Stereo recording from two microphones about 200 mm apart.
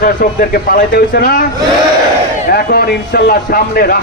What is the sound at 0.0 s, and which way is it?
Speech, 45° left (ahead or behind).